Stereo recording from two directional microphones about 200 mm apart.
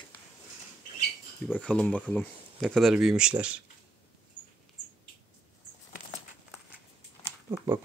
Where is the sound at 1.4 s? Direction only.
5° left (ahead or behind).